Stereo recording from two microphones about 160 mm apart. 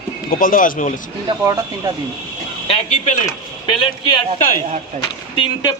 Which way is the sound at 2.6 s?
45° left (ahead or behind).